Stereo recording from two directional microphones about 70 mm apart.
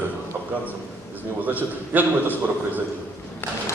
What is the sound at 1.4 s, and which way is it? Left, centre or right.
A man's voice, right.